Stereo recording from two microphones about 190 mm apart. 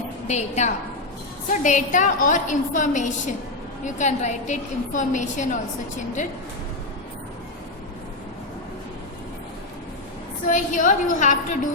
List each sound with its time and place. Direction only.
0.3 s a woman's voice: 35° left (ahead or behind)
10.4 s a woman's voice: 45° left (ahead or behind)